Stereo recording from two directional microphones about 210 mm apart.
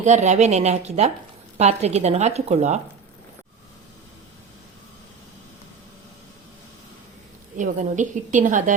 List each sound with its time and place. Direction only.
0.0 s speech: 35° right (ahead or behind)
7.5 s speech: 35° right (ahead or behind)